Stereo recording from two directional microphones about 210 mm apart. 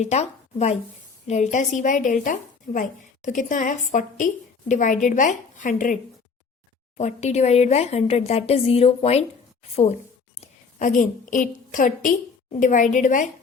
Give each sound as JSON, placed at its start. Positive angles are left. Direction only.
{"t": 0.0, "sound": "a woman's voice", "side_deg": 30}